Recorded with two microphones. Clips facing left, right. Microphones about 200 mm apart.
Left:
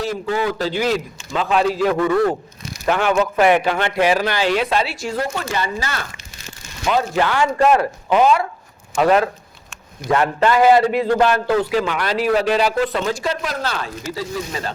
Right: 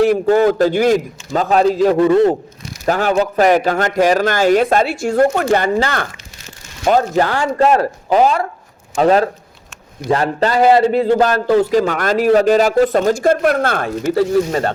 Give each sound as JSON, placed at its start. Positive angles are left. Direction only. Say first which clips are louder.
{"t": 0.0, "sound": "a man's voice", "louder": "right 10 dB", "side_deg": -55}
{"t": 2.0, "sound": "a man's voice", "louder": "right 6 dB", "side_deg": -25}
{"t": 2.8, "sound": "a man's voice", "louder": "right 2 dB", "side_deg": -40}
{"t": 6.8, "sound": "a man's voice", "louder": "right 5 dB", "side_deg": -40}